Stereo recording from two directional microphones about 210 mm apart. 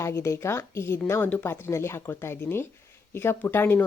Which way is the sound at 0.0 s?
15° left (ahead or behind).